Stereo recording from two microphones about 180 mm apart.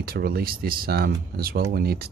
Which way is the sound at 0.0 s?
55° right (ahead or behind).